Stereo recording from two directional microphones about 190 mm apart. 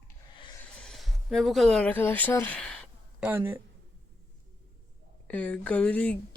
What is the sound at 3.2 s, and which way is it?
Speech, 10° right (ahead or behind).